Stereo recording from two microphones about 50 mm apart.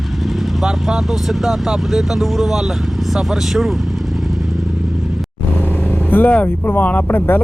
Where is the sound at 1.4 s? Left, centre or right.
Centre.